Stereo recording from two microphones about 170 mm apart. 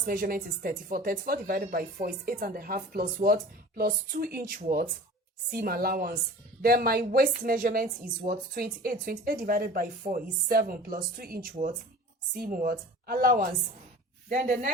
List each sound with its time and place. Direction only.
0.0 s a woman's voice: 55° right (ahead or behind)